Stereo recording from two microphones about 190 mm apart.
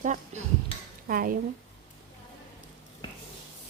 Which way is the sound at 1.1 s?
45° right (ahead or behind).